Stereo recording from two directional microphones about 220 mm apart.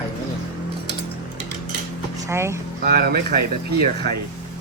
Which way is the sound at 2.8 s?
45° right (ahead or behind).